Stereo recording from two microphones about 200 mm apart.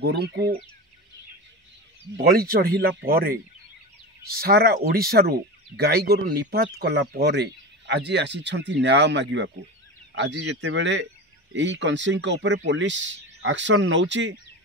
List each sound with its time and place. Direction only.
0.0 s speech: 55° right (ahead or behind)
2.1 s speech: 50° right (ahead or behind); by 14.3 s 65° right (ahead or behind)